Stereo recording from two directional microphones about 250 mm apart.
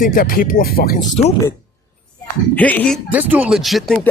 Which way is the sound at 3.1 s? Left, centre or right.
Centre.